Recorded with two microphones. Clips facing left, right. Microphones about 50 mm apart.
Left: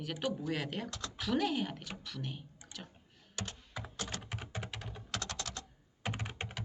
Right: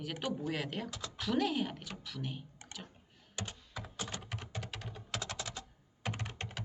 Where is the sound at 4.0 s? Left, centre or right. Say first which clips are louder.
Even; centre.